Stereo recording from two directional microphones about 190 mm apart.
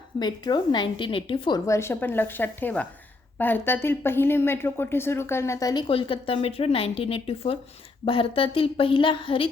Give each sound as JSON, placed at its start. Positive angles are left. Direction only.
{"t": 0.2, "sound": "a woman's voice", "side_deg": 20}